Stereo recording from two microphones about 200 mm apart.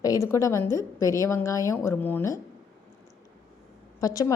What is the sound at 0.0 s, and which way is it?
Speech, 15° left (ahead or behind).